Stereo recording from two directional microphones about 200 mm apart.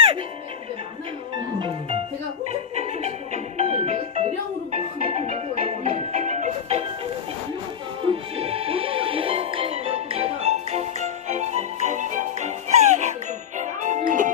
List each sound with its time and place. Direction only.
1.5 s music: 25° right (ahead or behind)
8.0 s music: 30° right (ahead or behind)